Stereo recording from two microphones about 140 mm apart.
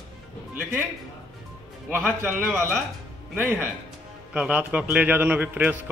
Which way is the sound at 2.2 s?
15° right (ahead or behind).